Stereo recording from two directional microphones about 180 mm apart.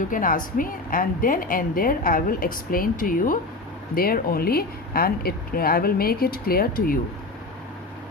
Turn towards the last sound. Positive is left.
turn(degrees=55)  # may be behind; listen again after turning